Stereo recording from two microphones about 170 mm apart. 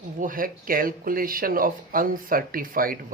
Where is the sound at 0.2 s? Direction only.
55° right (ahead or behind).